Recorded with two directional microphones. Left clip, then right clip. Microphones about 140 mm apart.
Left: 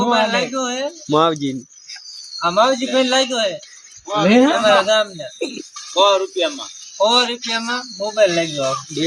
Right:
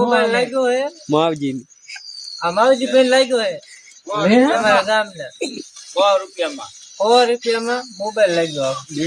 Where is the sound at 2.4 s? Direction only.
10° right (ahead or behind).